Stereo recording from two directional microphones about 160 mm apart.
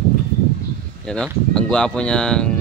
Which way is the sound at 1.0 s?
5° left (ahead or behind).